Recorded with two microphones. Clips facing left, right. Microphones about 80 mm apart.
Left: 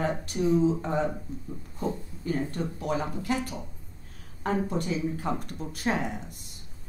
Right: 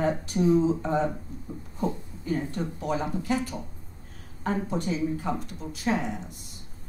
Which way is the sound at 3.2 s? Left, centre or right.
Left.